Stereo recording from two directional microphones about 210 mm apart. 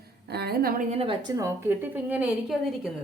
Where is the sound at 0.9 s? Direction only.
25° right (ahead or behind).